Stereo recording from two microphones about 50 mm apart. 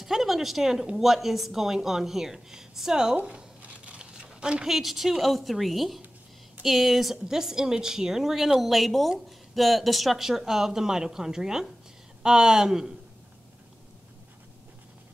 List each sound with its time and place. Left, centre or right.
0.0 s a woman's voice: centre
3.3 s crumpling: right
4.6 s speech: centre